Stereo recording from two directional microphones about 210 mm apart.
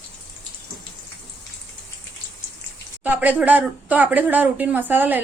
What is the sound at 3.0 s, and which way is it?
Speech, 5° right (ahead or behind).